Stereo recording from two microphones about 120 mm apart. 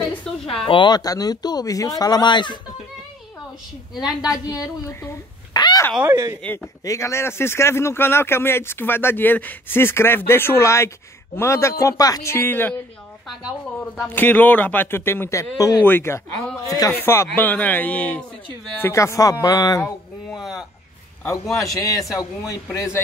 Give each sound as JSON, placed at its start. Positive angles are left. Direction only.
{"t": 0.3, "sound": "a sound", "side_deg": 5}
{"t": 0.7, "sound": "speech", "side_deg": 40}
{"t": 4.5, "sound": "speech", "side_deg": 25}
{"t": 5.5, "sound": "a sound", "side_deg": 35}
{"t": 6.0, "sound": "speech", "side_deg": -30}
{"t": 6.8, "sound": "speech", "side_deg": 25}
{"t": 14.0, "sound": "a man's voice", "side_deg": 15}
{"t": 18.8, "sound": "speech", "side_deg": 25}
{"t": 20.3, "sound": "a sound", "side_deg": -5}
{"t": 21.2, "sound": "speech", "side_deg": 25}